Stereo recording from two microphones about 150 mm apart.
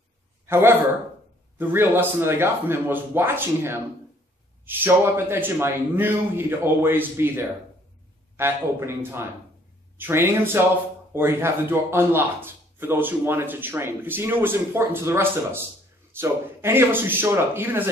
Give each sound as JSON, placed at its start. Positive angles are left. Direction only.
{"t": 0.5, "sound": "a man's voice", "side_deg": -15}